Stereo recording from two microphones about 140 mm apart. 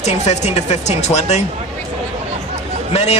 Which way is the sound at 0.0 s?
50° left (ahead or behind).